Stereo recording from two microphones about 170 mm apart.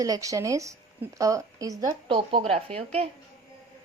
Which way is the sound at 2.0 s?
30° right (ahead or behind).